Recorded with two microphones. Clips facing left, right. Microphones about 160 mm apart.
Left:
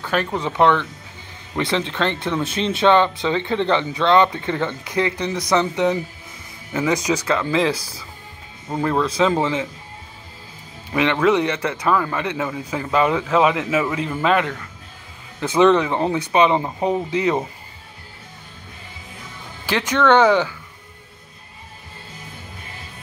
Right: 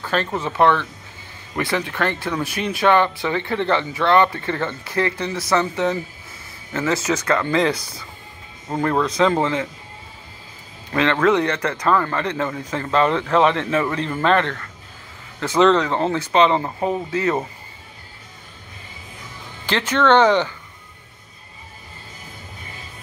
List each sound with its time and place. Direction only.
0.4 s speech: 15° left (ahead or behind)
10.9 s speech: 10° left (ahead or behind)
19.6 s speech: 10° left (ahead or behind)